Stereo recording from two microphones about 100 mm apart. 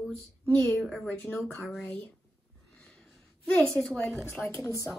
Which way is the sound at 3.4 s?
10° left (ahead or behind).